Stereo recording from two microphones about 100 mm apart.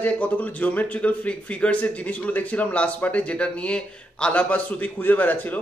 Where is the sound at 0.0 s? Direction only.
15° left (ahead or behind).